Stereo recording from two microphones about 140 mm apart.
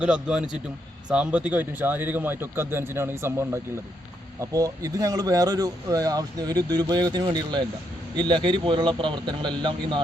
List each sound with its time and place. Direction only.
0.0 s a man's voice: 5° right (ahead or behind); by 10.0 s 35° right (ahead or behind)